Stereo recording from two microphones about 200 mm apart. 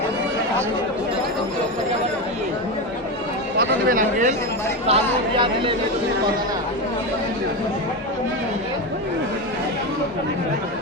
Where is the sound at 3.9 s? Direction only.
40° right (ahead or behind).